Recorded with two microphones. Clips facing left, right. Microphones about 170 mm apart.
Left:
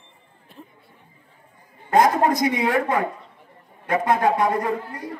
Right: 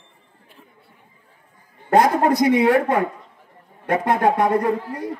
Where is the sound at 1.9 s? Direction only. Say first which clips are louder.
Right 2 dB; 65° right (ahead or behind).